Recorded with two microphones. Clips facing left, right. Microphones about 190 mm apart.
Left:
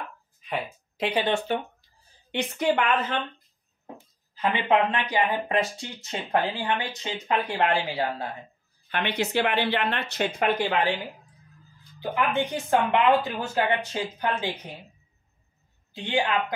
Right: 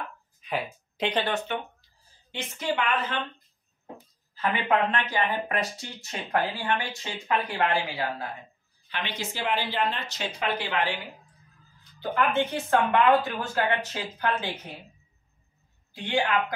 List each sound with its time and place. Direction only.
0.4 s speech: centre (ahead or behind)
1.5 s speech: 35° left (ahead or behind)
2.3 s speech: 60° left (ahead or behind)
4.4 s speech: 20° left (ahead or behind)
8.8 s speech: 55° left (ahead or behind)
12.0 s speech: 10° left (ahead or behind)
15.9 s speech: 20° left (ahead or behind)